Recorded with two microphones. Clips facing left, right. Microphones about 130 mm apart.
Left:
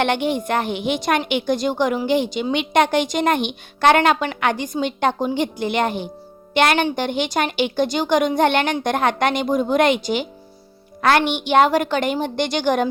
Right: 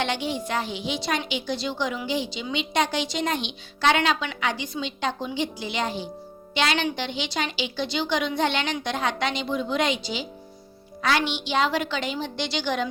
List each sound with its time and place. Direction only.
0.0 s a woman's voice: 55° left (ahead or behind)